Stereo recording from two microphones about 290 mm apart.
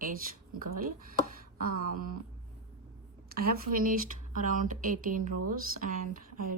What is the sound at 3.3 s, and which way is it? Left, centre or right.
A woman's voice, right.